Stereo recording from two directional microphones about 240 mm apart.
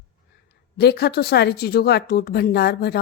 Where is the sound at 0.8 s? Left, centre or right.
Left.